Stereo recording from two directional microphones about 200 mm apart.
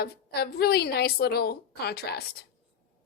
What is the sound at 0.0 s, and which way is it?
A woman's voice, 50° left (ahead or behind).